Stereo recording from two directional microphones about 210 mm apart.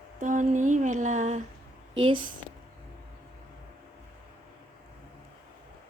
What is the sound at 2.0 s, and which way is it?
Speech, 25° right (ahead or behind).